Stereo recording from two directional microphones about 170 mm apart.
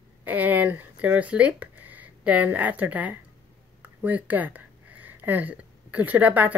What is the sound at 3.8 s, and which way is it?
Speech, 10° right (ahead or behind).